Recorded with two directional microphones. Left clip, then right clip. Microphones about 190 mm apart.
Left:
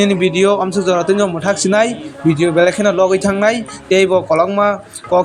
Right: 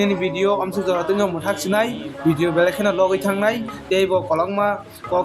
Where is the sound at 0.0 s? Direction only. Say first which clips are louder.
Left 7 dB; 30° left (ahead or behind).